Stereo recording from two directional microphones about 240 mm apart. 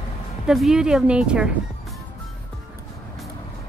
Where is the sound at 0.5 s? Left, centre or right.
Centre.